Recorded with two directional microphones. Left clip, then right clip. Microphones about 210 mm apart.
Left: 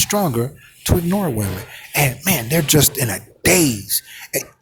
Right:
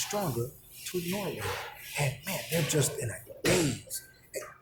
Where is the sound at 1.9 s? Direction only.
45° left (ahead or behind).